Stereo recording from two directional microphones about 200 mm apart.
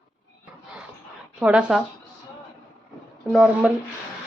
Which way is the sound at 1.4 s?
5° right (ahead or behind).